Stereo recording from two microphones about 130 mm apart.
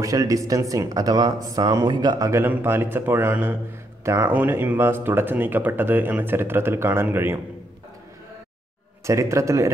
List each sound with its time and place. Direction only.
0.0 s speech: 25° right (ahead or behind)
2.4 s speech: 15° right (ahead or behind)
9.0 s speech: 25° right (ahead or behind)